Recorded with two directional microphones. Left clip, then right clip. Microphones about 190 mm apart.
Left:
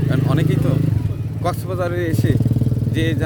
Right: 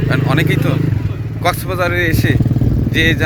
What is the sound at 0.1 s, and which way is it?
Vehicle, 15° left (ahead or behind).